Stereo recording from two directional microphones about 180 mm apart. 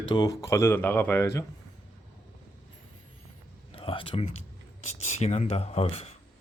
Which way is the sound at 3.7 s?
30° left (ahead or behind).